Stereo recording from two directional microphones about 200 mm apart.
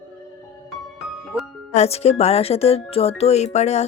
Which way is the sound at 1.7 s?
30° left (ahead or behind).